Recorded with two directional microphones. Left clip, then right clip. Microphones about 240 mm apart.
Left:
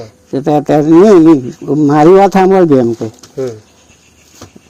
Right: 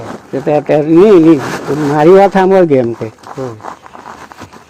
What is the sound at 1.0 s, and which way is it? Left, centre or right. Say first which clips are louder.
Speech: even; left.